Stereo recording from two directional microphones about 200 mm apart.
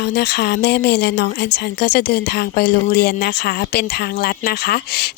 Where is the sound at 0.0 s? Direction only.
55° left (ahead or behind).